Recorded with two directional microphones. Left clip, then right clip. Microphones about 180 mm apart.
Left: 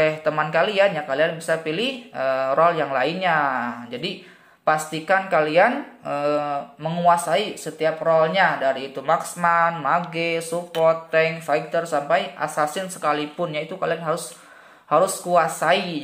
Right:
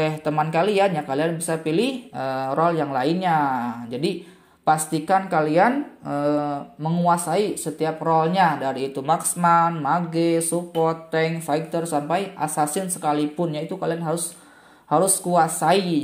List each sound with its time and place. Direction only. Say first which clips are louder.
0.0 s speech: left 2 dB; 25° right (ahead or behind)